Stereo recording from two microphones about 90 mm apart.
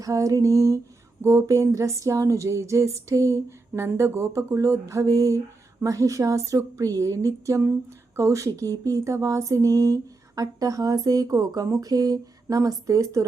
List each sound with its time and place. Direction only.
0.0 s speech: 40° right (ahead or behind)